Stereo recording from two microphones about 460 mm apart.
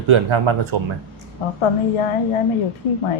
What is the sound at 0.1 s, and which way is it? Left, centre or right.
Speech, right.